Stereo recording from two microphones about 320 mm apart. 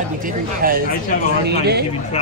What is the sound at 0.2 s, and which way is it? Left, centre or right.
Speech, right.